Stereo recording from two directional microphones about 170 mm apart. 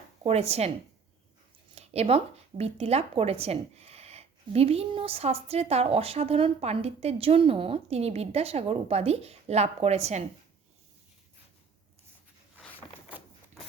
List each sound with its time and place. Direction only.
0.2 s speech: 40° right (ahead or behind)
1.7 s speech: 40° right (ahead or behind)
13.1 s a sound: 10° right (ahead or behind)